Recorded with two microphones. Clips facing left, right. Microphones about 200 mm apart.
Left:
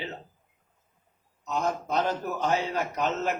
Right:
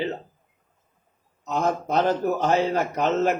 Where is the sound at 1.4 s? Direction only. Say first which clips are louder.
Right 4 dB; 60° right (ahead or behind).